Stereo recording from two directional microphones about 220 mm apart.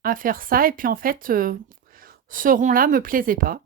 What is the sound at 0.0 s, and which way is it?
Speech, 40° right (ahead or behind).